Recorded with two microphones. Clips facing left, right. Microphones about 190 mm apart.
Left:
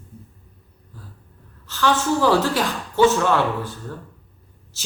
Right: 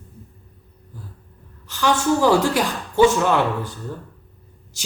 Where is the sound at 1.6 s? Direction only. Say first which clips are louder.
Right 1 dB; 15° right (ahead or behind).